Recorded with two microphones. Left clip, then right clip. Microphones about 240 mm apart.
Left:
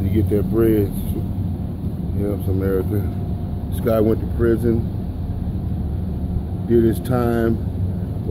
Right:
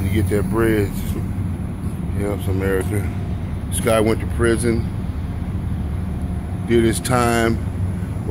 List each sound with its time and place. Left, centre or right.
0.1 s speech: left
3.8 s speech: centre
6.7 s speech: centre